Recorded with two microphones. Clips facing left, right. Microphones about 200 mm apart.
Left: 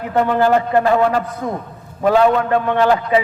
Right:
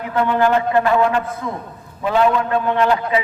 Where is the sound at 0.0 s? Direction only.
45° left (ahead or behind).